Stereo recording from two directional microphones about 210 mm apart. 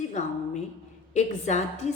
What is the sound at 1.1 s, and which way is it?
Speech, 35° left (ahead or behind).